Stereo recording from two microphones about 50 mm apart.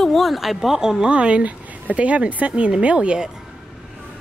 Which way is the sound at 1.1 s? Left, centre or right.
Right.